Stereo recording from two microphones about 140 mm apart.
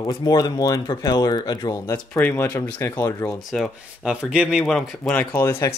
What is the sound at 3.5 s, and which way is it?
Speech, centre (ahead or behind).